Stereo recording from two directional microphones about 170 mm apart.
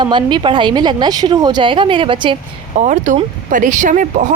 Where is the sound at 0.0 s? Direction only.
25° right (ahead or behind).